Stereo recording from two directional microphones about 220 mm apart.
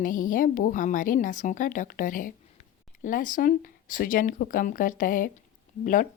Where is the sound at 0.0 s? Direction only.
40° left (ahead or behind).